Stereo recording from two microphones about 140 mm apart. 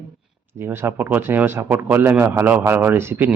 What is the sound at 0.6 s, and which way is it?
Speech, 15° right (ahead or behind).